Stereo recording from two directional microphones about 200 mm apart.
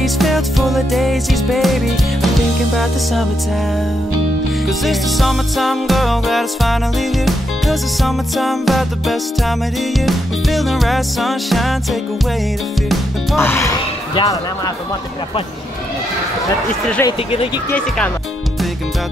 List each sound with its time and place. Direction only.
0.0 s music: centre (ahead or behind)
4.6 s music: centre (ahead or behind)
13.4 s speech: 15° left (ahead or behind)
17.0 s speech: 10° left (ahead or behind)